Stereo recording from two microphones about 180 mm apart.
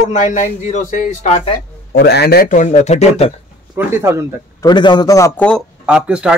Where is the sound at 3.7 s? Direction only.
15° right (ahead or behind).